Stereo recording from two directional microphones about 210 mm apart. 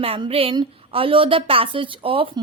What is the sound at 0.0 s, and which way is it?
A woman's voice, 25° right (ahead or behind).